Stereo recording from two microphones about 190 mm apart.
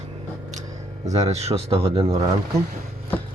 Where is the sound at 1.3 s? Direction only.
35° right (ahead or behind).